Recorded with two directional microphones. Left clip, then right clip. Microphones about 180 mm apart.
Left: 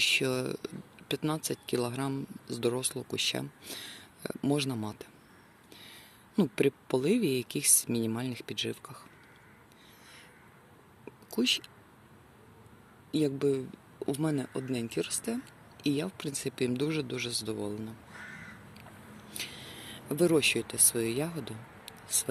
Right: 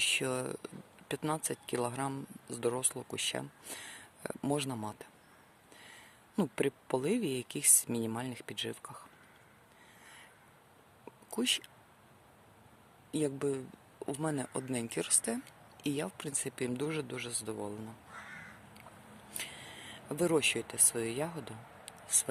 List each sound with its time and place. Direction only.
0.0 s speech: 5° right (ahead or behind)
6.3 s speech: 5° right (ahead or behind)
11.3 s speech: 15° right (ahead or behind)
13.1 s speech: 10° right (ahead or behind)
14.3 s speech: 15° right (ahead or behind)
19.3 s speech: 5° right (ahead or behind)